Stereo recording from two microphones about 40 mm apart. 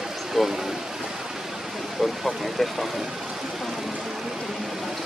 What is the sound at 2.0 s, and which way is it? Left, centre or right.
Speech, centre.